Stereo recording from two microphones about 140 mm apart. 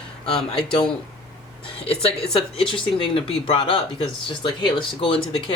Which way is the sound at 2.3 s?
40° left (ahead or behind).